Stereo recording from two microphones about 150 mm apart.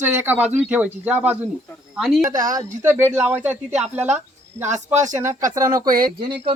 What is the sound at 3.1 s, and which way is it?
Speech, 10° right (ahead or behind).